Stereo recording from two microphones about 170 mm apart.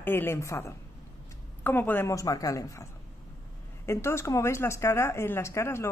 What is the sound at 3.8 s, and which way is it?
Speech, 15° left (ahead or behind).